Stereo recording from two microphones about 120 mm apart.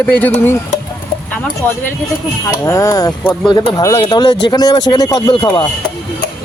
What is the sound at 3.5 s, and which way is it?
Speech, 45° left (ahead or behind).